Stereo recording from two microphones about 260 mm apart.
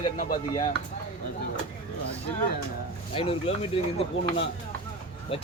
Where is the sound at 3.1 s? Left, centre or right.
Left.